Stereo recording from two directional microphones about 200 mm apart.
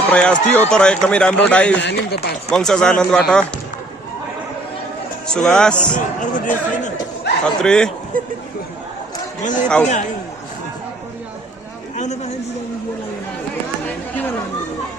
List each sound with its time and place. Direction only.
0.1 s speech: 5° left (ahead or behind)
1.8 s speech: 55° left (ahead or behind)
2.5 s speech: 5° left (ahead or behind)
5.3 s speech: 5° left (ahead or behind)
6.1 s a man's voice: 40° left (ahead or behind)
7.4 s speech: 5° left (ahead or behind)
8.1 s speech: 45° right (ahead or behind)
9.4 s a man's voice: 40° left (ahead or behind)
11.9 s a sound: 35° left (ahead or behind)
13.8 s chatter: 10° left (ahead or behind)